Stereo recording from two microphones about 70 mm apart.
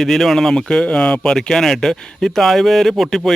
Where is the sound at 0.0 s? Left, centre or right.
Centre.